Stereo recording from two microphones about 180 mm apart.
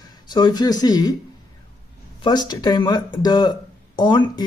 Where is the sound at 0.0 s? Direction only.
25° left (ahead or behind).